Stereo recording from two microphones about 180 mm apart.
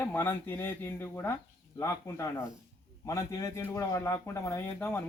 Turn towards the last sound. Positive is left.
turn(degrees=15)  # may be behind; listen again after turning